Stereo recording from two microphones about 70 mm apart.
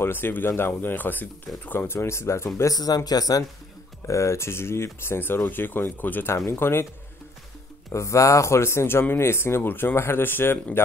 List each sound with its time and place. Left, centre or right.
0.0 s speech: left
2.7 s speech: left
4.1 s speech: left
7.9 s speech: left